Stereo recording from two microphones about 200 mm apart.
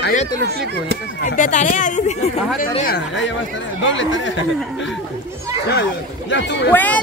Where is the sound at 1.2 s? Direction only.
40° left (ahead or behind).